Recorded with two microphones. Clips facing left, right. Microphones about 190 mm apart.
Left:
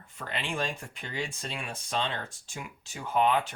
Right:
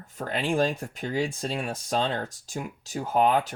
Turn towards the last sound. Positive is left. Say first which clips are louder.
# right 3 dB
turn(degrees=-40)  # may be behind; listen again after turning